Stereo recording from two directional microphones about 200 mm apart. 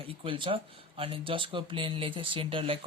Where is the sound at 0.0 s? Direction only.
25° right (ahead or behind).